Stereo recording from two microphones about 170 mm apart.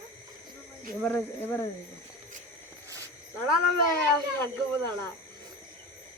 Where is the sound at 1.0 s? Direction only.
15° left (ahead or behind).